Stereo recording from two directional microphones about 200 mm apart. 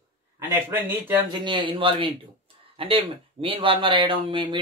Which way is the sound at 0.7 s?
10° right (ahead or behind).